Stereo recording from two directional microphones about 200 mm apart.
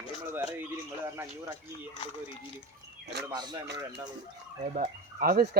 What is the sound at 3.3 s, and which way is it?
Speech, 20° right (ahead or behind).